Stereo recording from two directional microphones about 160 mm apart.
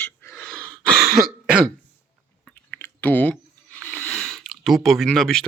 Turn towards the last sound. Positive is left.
turn(degrees=5)  # may be behind; listen again after turning